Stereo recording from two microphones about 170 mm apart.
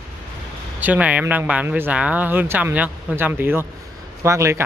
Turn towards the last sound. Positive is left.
turn(degrees=-15)  # may be behind; listen again after turning